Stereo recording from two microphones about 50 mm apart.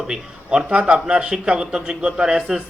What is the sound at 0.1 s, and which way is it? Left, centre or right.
A man's voice, centre.